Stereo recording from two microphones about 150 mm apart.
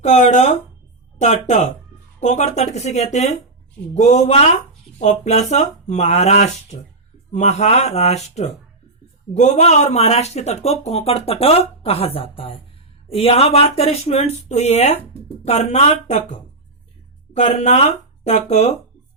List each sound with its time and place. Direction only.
0.0 s speech: 50° left (ahead or behind)